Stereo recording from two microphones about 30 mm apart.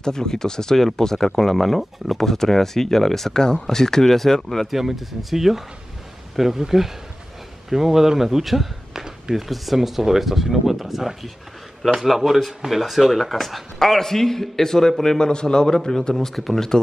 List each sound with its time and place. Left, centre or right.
0.0 s speech: left
1.3 s speech: centre
4.6 s speech: centre
7.7 s speech: centre
13.7 s speech: centre
16.3 s speech: centre